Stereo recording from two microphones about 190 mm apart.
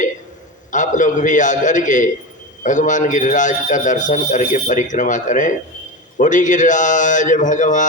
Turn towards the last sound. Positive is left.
turn(degrees=40)  # may be behind; listen again after turning